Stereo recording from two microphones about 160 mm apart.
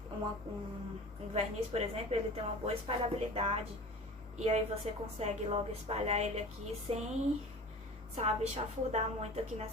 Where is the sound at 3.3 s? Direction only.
40° right (ahead or behind).